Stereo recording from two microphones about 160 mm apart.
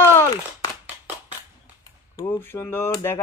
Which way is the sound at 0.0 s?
15° left (ahead or behind).